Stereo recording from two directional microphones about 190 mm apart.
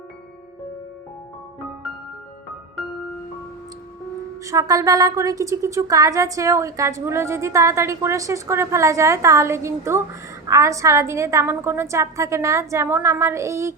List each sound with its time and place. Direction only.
4.4 s a woman's voice: 15° right (ahead or behind)